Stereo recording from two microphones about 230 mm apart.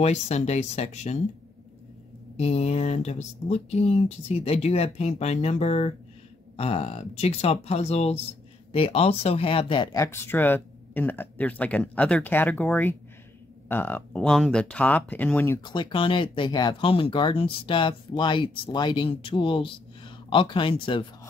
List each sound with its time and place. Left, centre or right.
0.0 s speech: left
2.3 s speech: left